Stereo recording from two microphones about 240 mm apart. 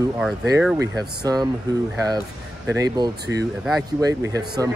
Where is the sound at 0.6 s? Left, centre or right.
Centre.